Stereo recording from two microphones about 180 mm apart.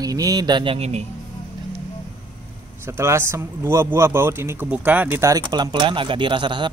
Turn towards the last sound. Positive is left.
turn(degrees=-25)  # may be behind; listen again after turning